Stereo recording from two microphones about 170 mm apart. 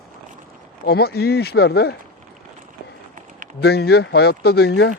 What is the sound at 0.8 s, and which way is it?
Speech, 70° left (ahead or behind).